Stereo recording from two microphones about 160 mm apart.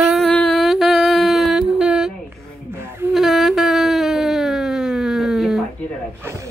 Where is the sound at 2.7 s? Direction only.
15° right (ahead or behind).